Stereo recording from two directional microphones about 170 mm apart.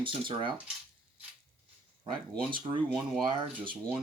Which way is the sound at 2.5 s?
30° right (ahead or behind).